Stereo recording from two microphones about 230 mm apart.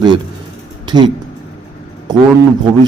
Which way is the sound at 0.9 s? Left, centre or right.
Centre.